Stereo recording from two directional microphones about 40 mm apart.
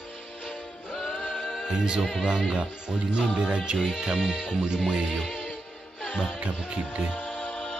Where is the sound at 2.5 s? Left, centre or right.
Right.